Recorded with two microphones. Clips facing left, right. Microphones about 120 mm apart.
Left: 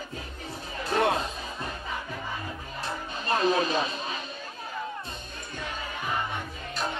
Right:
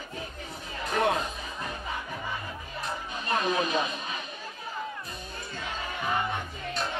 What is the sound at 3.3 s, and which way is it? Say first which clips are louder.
Music: left 3 dB; 30° left (ahead or behind).